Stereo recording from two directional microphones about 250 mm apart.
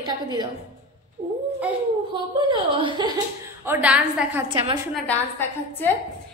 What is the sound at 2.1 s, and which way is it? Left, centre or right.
A woman's voice, centre.